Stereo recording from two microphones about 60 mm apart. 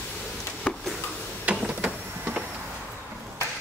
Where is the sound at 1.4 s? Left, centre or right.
Centre.